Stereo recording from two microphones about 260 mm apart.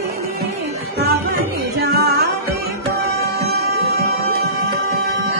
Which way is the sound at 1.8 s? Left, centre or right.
Right.